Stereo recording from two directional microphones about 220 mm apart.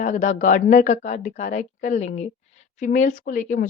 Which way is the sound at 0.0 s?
35° left (ahead or behind).